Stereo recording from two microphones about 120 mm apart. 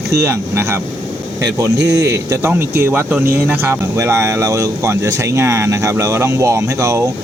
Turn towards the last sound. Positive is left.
turn(degrees=-25)  # may be behind; listen again after turning